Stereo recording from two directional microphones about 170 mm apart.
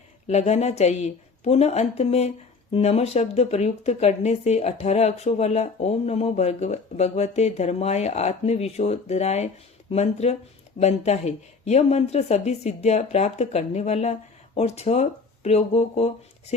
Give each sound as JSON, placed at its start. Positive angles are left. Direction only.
{"t": 0.3, "sound": "a woman's voice", "side_deg": 40}